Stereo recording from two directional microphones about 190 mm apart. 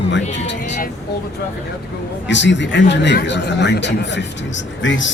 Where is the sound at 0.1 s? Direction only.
70° left (ahead or behind).